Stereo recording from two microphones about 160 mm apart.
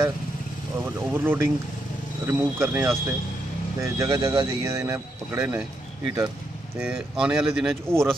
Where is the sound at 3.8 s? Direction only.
20° right (ahead or behind).